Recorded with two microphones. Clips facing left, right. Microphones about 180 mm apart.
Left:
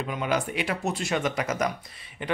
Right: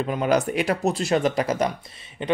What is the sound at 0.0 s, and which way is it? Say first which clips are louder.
Speech: right 6 dB; 40° right (ahead or behind).